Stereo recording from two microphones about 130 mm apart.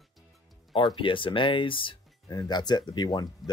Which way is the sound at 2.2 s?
30° left (ahead or behind).